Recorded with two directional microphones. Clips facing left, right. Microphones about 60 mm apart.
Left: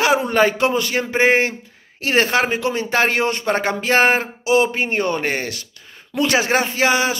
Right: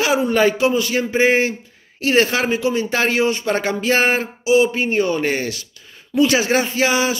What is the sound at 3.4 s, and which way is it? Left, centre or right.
Speech, left.